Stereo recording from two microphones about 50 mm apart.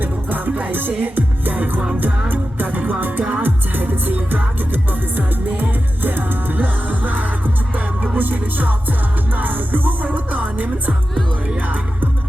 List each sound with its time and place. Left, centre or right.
0.0 s music: right